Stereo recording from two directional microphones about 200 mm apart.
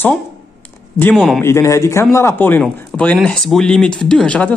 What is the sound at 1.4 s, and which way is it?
A man's voice, 15° left (ahead or behind).